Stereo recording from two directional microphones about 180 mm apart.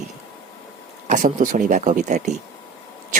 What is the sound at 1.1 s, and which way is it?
Speech, 45° right (ahead or behind).